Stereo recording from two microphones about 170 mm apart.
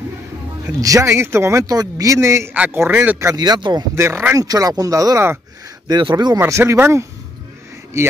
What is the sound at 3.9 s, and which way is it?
Speech, 15° right (ahead or behind).